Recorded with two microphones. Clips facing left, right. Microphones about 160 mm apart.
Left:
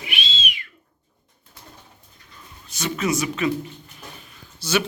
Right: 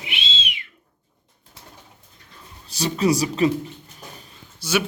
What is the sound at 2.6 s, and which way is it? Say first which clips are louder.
Speech: right 4 dB; 35° right (ahead or behind).